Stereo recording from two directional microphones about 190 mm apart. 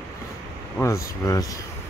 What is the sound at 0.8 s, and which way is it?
Speech, 15° left (ahead or behind).